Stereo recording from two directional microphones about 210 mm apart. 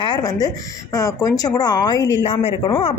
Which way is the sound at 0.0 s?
20° left (ahead or behind).